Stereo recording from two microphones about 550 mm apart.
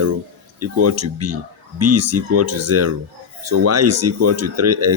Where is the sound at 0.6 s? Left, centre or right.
Right.